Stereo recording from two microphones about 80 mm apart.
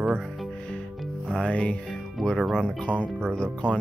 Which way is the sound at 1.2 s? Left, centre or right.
Centre.